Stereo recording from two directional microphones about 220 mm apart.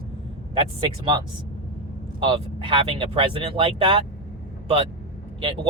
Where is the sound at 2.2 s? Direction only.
25° right (ahead or behind).